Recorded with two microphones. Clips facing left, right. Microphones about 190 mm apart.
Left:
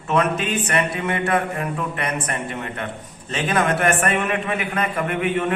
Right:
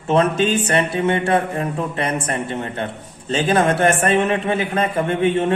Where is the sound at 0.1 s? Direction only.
30° right (ahead or behind).